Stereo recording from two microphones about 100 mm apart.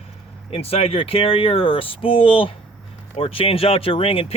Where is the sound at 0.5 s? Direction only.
75° left (ahead or behind).